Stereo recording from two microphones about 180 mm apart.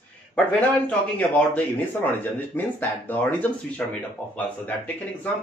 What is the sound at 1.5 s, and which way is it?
A man's voice, 10° left (ahead or behind).